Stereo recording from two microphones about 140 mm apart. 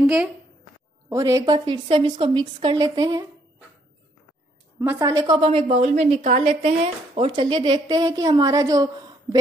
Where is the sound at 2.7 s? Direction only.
30° right (ahead or behind).